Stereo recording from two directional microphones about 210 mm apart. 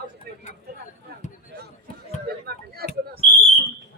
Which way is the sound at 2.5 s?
50° right (ahead or behind).